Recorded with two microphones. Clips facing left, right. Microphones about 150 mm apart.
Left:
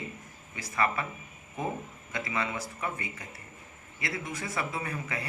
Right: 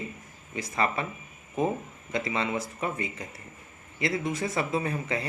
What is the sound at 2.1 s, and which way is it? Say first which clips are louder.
Speech: right 4 dB; 25° right (ahead or behind).